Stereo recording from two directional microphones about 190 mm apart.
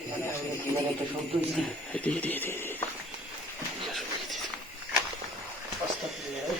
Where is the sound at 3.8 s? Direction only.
Centre (ahead or behind).